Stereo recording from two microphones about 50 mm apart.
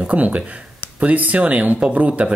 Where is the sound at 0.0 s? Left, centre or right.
Right.